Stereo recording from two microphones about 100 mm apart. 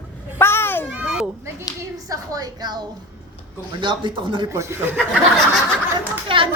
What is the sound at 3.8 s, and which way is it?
Speech, 55° right (ahead or behind).